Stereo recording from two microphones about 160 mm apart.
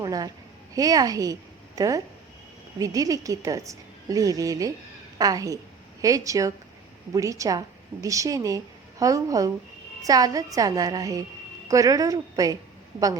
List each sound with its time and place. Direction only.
0.0 s a woman's voice: 25° right (ahead or behind)